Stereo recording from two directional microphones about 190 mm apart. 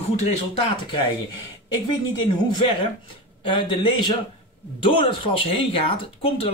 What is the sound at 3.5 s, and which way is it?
Speech, 25° left (ahead or behind).